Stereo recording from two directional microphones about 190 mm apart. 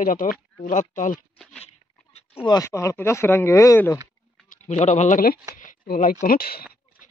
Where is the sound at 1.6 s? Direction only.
35° left (ahead or behind).